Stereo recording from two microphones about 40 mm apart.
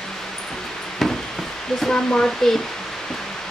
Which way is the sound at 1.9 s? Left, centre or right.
Left.